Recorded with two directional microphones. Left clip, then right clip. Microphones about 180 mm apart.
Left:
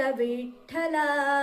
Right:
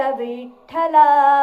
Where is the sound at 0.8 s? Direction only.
20° left (ahead or behind).